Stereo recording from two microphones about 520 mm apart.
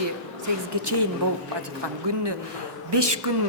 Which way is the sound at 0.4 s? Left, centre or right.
Right.